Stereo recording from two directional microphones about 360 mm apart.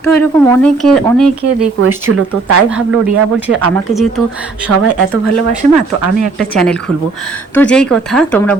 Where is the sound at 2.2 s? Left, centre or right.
Right.